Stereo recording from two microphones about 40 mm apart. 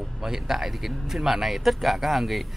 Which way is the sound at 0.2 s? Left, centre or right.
Centre.